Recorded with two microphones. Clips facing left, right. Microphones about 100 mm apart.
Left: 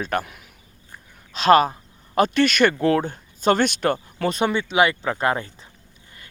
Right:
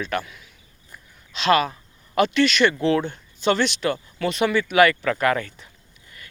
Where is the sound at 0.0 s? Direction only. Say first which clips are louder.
Left 2 dB; 45° left (ahead or behind).